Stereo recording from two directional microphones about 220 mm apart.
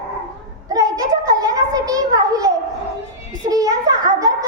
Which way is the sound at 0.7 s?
15° right (ahead or behind).